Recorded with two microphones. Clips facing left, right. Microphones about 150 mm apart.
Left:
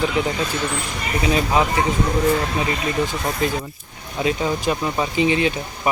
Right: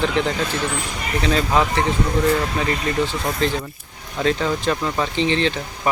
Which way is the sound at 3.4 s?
10° left (ahead or behind).